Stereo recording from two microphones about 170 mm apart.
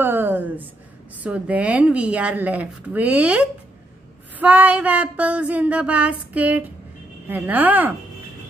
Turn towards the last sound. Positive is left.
turn(degrees=-10)  # may be behind; listen again after turning